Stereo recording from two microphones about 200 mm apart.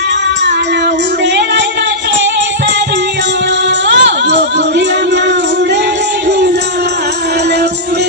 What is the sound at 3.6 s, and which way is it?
Music, 60° right (ahead or behind).